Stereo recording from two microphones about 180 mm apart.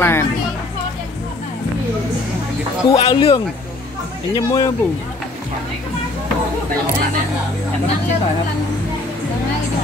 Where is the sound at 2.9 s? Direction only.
30° left (ahead or behind).